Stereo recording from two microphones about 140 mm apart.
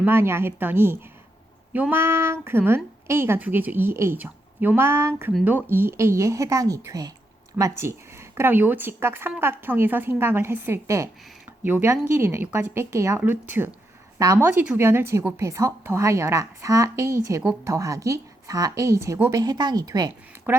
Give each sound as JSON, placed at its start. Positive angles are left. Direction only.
{"t": 0.0, "sound": "a woman's voice", "side_deg": -15}
{"t": 20.5, "sound": "speech", "side_deg": -15}